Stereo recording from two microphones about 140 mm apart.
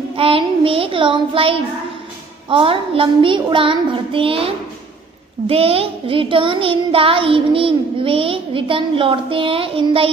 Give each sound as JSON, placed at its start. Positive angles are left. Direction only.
{"t": 0.1, "sound": "child singing", "side_deg": -40}